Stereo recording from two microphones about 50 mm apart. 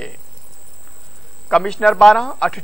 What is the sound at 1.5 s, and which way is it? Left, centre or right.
A man's voice, centre.